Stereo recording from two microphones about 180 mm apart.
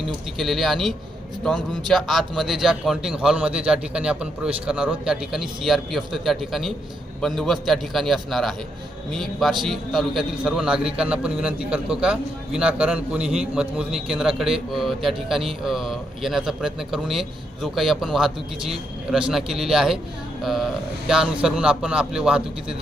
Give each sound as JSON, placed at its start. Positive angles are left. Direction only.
{"t": 0.0, "sound": "a man's voice", "side_deg": 0}
{"t": 19.3, "sound": "a man's voice", "side_deg": 0}